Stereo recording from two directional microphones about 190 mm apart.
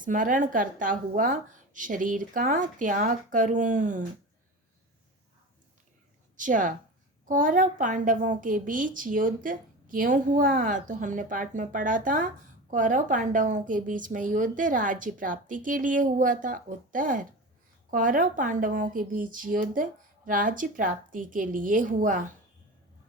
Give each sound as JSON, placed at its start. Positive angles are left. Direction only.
{"t": 0.0, "sound": "a woman's voice", "side_deg": -45}
{"t": 6.3, "sound": "a woman's voice", "side_deg": -45}